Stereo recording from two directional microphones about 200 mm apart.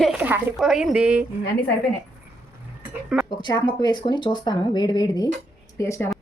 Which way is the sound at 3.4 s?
20° left (ahead or behind).